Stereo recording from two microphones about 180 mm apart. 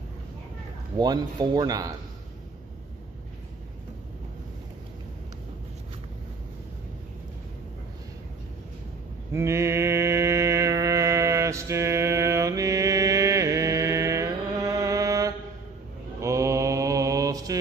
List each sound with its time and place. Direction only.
0.9 s speech: 20° right (ahead or behind)
9.3 s music: 15° right (ahead or behind)
16.2 s mantra: 15° right (ahead or behind)